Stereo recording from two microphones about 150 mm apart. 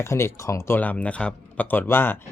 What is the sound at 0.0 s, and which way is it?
Speech, 20° left (ahead or behind).